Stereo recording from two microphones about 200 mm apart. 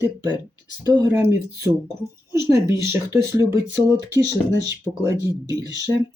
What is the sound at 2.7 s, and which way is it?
Speech, 15° right (ahead or behind).